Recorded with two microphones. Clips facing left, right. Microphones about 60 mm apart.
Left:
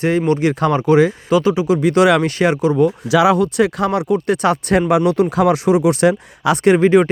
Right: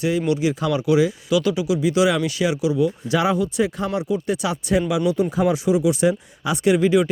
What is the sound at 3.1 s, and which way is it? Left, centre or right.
Speech, left.